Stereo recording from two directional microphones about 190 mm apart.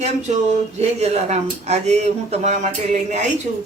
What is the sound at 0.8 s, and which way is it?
Speech, 35° right (ahead or behind).